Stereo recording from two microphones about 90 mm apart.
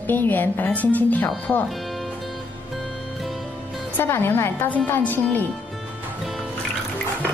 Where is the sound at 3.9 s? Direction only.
25° left (ahead or behind).